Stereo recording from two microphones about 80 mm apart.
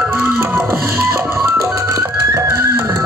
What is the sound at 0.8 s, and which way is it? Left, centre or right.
Music, right.